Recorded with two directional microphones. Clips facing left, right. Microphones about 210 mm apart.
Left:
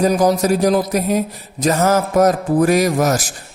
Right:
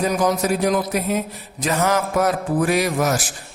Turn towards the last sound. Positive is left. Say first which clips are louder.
# left 4 dB
turn(degrees=40)  # may be behind; listen again after turning